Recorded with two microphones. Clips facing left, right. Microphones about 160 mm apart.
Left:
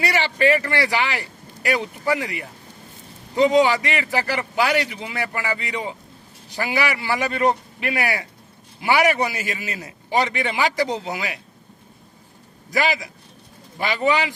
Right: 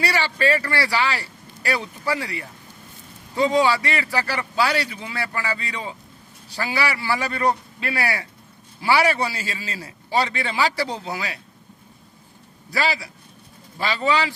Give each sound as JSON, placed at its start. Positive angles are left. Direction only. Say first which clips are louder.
{"t": 0.0, "sound": "a man's voice", "louder": "left 2 dB", "side_deg": 20}
{"t": 12.7, "sound": "a man's voice", "louder": "left 2 dB", "side_deg": 20}